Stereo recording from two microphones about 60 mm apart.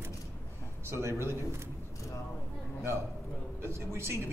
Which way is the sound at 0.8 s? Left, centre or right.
Right.